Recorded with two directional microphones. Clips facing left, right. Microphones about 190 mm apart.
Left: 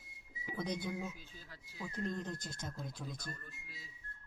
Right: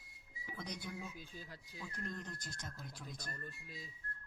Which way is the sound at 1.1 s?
15° right (ahead or behind).